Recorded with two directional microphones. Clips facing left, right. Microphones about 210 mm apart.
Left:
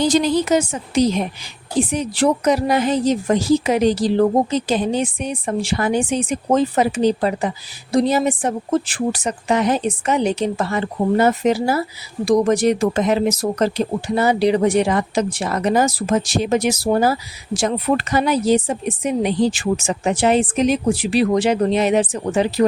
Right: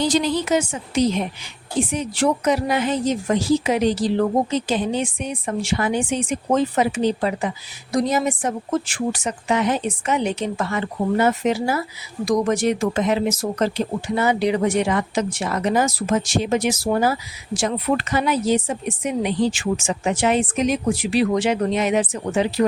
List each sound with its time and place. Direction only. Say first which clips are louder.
0.0 s a woman's voice: left 3 dB; 45° left (ahead or behind)